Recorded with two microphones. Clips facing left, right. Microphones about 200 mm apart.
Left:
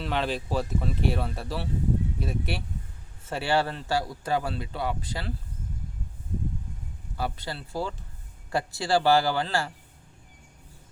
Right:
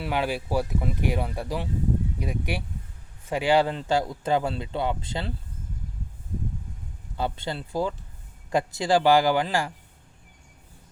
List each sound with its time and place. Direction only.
0.0 s speech: 10° right (ahead or behind)
7.2 s speech: 25° right (ahead or behind)